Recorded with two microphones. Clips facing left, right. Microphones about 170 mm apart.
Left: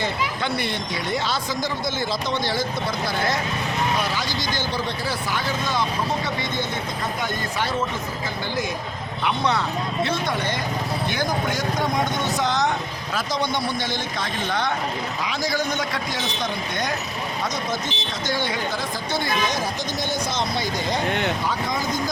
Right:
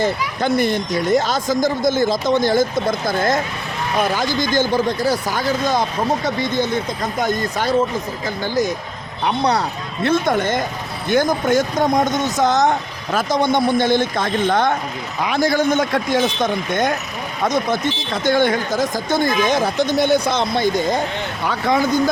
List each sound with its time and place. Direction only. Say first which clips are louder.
0.0 s speech: right 6 dB; 45° right (ahead or behind)
7.2 s speech: right 9 dB; 40° right (ahead or behind)
9.2 s speech: right 5 dB; 35° right (ahead or behind)
10.0 s speech: right 9 dB; 50° right (ahead or behind)
21.4 s speech: right 7 dB; 65° right (ahead or behind)